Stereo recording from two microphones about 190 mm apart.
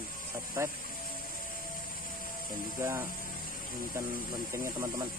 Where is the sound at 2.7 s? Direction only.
15° right (ahead or behind).